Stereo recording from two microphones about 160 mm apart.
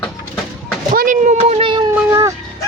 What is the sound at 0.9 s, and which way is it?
Speech, 55° right (ahead or behind).